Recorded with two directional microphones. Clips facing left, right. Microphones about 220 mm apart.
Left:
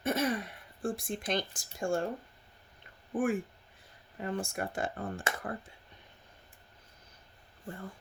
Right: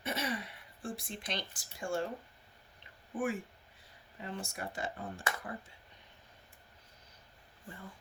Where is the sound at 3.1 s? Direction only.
50° left (ahead or behind).